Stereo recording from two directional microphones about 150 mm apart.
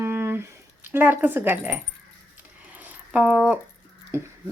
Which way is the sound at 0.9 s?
15° right (ahead or behind).